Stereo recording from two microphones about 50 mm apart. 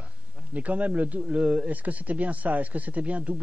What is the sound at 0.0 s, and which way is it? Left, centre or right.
A man's voice, right.